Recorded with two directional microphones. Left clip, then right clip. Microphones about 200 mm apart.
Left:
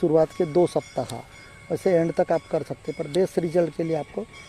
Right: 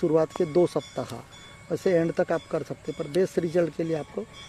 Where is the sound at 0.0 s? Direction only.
10° left (ahead or behind).